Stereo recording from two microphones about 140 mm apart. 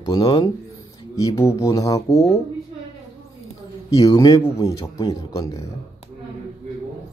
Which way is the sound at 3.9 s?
25° left (ahead or behind).